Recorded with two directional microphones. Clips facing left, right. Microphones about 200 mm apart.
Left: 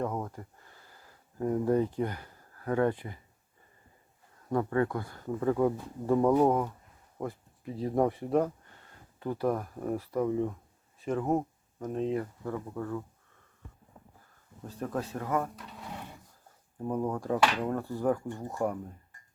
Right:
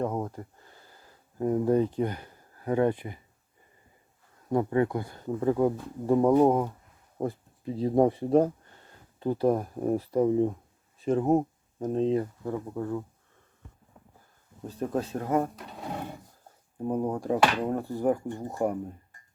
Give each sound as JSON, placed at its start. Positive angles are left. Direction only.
{"t": 0.0, "sound": "speech", "side_deg": -20}
{"t": 4.4, "sound": "speech", "side_deg": -20}
{"t": 14.8, "sound": "speech", "side_deg": -25}
{"t": 16.9, "sound": "speech", "side_deg": -20}